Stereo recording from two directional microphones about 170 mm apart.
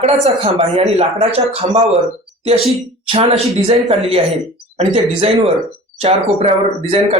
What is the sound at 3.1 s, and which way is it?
A man's voice, 35° right (ahead or behind).